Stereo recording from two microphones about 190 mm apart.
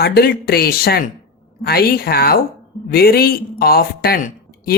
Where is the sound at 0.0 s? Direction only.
55° left (ahead or behind).